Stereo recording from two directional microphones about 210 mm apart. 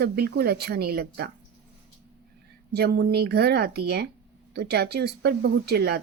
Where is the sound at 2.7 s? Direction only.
50° right (ahead or behind).